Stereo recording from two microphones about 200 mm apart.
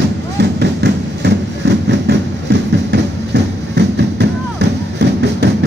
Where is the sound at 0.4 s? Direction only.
60° right (ahead or behind).